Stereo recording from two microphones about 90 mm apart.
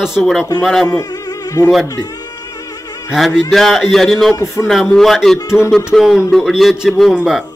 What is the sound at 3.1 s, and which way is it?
Speech, centre (ahead or behind).